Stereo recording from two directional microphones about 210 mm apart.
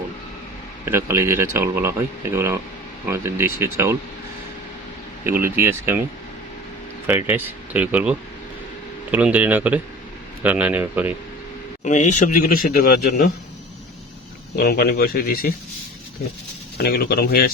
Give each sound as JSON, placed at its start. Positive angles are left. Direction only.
{"t": 0.9, "sound": "a man's voice", "side_deg": -10}
{"t": 5.2, "sound": "a man's voice", "side_deg": -10}
{"t": 7.3, "sound": "a man's voice", "side_deg": -10}
{"t": 9.1, "sound": "a man's voice", "side_deg": -10}
{"t": 11.8, "sound": "speech", "side_deg": 35}
{"t": 14.5, "sound": "speech", "side_deg": 50}
{"t": 16.7, "sound": "speech", "side_deg": 45}